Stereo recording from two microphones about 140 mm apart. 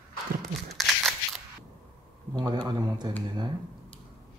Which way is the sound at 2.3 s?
30° right (ahead or behind).